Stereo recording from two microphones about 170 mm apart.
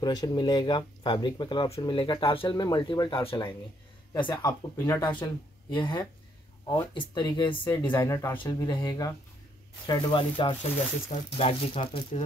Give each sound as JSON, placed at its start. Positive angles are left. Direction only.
{"t": 0.0, "sound": "speech", "side_deg": 25}